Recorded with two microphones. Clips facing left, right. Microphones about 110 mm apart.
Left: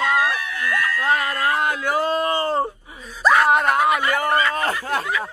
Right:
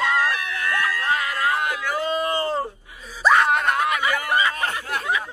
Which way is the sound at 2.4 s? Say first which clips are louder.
Left 3 dB; 25° left (ahead or behind).